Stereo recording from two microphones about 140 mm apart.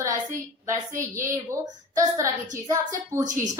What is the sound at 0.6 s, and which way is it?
A woman's voice, 20° right (ahead or behind).